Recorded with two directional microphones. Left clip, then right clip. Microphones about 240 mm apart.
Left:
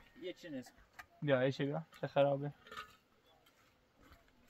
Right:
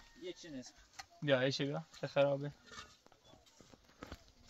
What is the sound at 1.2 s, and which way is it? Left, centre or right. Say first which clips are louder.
Speech: even; centre.